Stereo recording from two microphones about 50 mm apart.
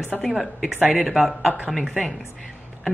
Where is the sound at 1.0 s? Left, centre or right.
Centre.